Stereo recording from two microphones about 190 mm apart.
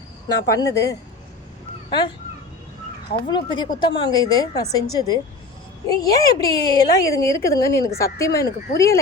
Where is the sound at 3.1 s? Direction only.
25° left (ahead or behind).